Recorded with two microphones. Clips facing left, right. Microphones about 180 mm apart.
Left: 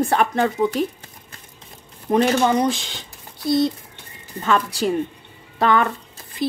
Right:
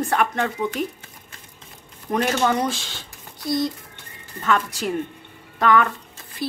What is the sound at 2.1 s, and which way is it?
Speech, 20° left (ahead or behind).